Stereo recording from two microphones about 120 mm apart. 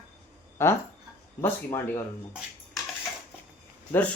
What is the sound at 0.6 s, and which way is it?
Speech, 20° left (ahead or behind).